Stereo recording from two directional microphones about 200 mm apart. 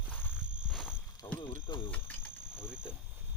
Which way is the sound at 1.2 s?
25° left (ahead or behind).